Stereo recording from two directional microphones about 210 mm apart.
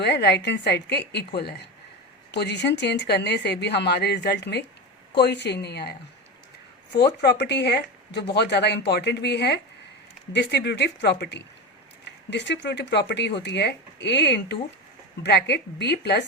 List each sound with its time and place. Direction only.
0.0 s speech: 50° left (ahead or behind)